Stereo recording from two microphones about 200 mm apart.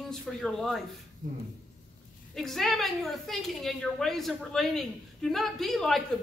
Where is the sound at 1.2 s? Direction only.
40° right (ahead or behind).